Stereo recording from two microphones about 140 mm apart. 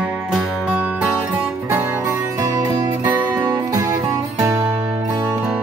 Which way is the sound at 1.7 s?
20° right (ahead or behind).